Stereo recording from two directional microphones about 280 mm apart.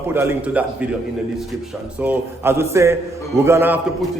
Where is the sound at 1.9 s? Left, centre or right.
Centre.